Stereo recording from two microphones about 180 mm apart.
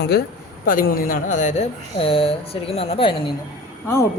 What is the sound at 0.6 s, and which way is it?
Speech, 50° left (ahead or behind).